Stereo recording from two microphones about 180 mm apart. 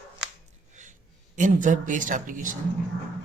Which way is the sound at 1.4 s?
45° right (ahead or behind).